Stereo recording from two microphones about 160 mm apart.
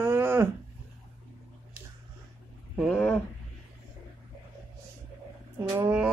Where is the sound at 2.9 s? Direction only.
10° left (ahead or behind).